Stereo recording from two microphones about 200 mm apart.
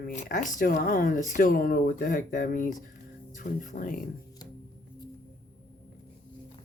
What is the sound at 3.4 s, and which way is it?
Wail, 40° left (ahead or behind).